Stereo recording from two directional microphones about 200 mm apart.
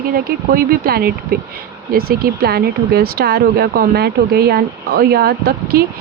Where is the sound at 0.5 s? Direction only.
50° right (ahead or behind).